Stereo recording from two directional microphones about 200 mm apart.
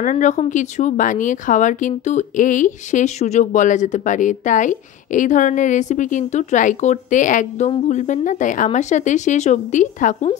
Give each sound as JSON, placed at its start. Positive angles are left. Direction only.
{"t": 0.0, "sound": "speech", "side_deg": 35}